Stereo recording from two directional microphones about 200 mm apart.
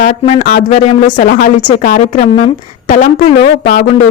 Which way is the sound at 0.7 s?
30° left (ahead or behind).